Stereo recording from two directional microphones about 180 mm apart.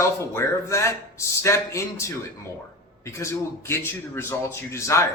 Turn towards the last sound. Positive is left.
turn(degrees=15)  # may be behind; listen again after turning